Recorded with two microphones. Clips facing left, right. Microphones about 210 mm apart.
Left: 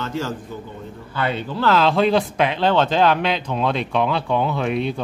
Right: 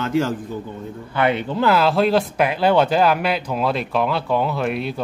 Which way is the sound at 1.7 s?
5° right (ahead or behind).